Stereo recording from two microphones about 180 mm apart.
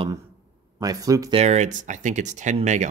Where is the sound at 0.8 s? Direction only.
20° right (ahead or behind).